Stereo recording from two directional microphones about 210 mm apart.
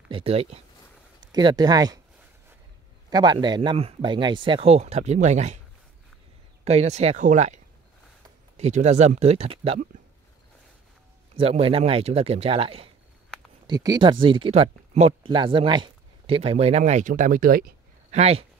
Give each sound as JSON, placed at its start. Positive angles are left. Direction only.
{"t": 0.1, "sound": "speech", "side_deg": -30}
{"t": 3.1, "sound": "speech", "side_deg": -20}
{"t": 6.6, "sound": "speech", "side_deg": -30}
{"t": 11.3, "sound": "speech", "side_deg": -25}